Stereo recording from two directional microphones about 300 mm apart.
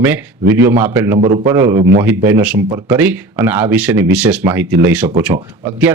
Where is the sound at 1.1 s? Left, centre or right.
Right.